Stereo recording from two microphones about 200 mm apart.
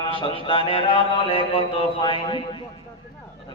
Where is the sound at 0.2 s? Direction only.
25° left (ahead or behind).